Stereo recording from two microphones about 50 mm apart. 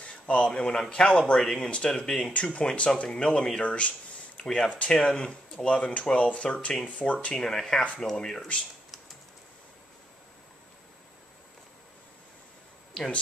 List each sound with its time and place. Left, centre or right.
0.0 s a sound: left
0.5 s speech: centre
1.4 s speech: centre; by 7.3 s left
7.3 s speech: centre
7.8 s speech: left
8.1 s speech: centre
12.9 s speech: centre